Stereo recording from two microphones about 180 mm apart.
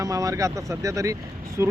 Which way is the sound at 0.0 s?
20° right (ahead or behind).